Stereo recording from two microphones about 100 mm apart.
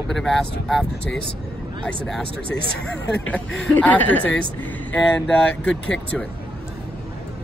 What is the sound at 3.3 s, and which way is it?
Speech, 15° left (ahead or behind).